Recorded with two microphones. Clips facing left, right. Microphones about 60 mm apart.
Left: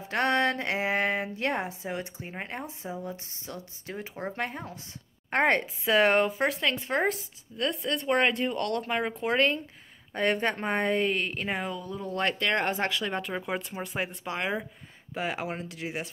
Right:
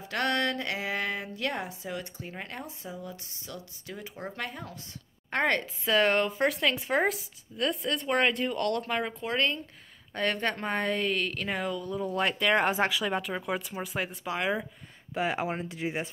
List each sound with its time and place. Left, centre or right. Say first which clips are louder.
0.1 s a woman's voice: left 3 dB; left
6.3 s speech: right 1 dB; centre
9.1 s a woman's voice: left 4 dB; left; by 16.1 s centre